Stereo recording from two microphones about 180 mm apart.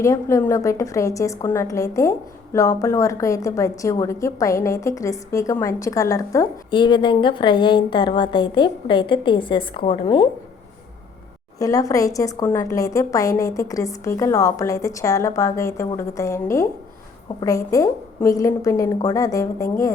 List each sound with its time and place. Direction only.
0.0 s a woman's voice: 15° left (ahead or behind)
11.6 s a woman's voice: 20° left (ahead or behind)